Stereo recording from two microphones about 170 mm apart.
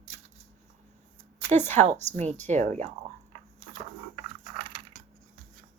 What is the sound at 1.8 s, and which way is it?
A woman's voice, 40° right (ahead or behind).